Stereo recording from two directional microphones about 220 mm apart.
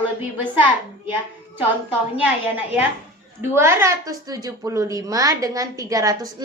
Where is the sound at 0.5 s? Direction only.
10° right (ahead or behind).